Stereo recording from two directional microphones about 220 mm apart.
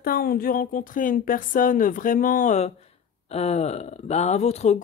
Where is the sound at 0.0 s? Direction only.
40° left (ahead or behind).